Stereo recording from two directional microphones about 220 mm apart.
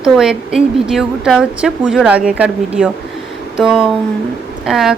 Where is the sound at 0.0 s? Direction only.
Centre (ahead or behind).